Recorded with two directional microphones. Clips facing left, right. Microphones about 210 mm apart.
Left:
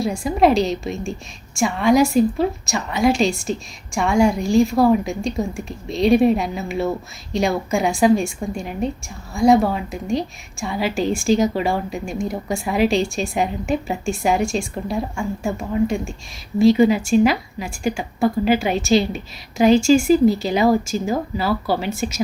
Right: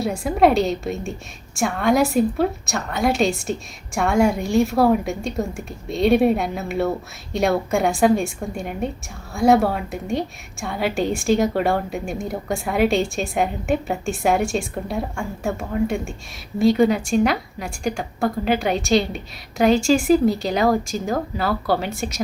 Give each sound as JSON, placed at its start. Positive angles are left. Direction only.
{"t": 0.0, "sound": "a woman's voice", "side_deg": 0}